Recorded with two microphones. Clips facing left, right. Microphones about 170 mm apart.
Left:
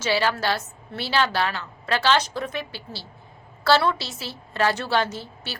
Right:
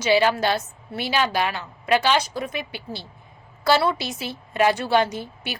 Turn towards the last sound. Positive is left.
turn(degrees=-15)  # may be behind; listen again after turning